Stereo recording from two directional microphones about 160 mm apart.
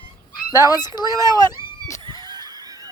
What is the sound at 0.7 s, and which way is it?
Speech, 25° left (ahead or behind).